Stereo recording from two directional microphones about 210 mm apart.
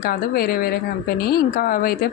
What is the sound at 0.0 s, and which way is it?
Speech, 45° left (ahead or behind).